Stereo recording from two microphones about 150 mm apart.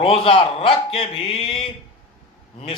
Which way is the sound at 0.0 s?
40° left (ahead or behind).